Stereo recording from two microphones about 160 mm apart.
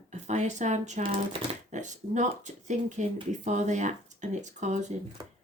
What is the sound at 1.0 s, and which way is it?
Speech, 35° right (ahead or behind).